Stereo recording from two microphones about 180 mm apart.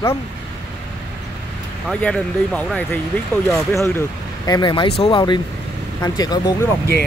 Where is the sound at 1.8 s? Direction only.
5° left (ahead or behind); by 6.6 s 20° left (ahead or behind).